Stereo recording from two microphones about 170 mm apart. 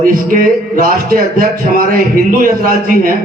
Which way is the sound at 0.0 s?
55° right (ahead or behind).